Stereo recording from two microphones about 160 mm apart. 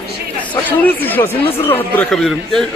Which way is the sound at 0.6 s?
10° left (ahead or behind).